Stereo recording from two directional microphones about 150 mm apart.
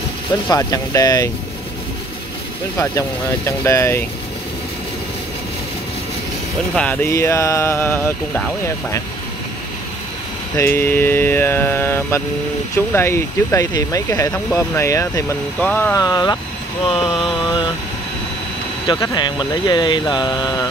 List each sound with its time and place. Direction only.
0.5 s speech: 25° left (ahead or behind)
2.8 s speech: 20° left (ahead or behind)
6.7 s speech: 10° left (ahead or behind)
10.6 s speech: 15° left (ahead or behind)
16.0 s speech: 25° left (ahead or behind)
16.8 s mantra: 40° left (ahead or behind)
18.9 s speech: 25° left (ahead or behind)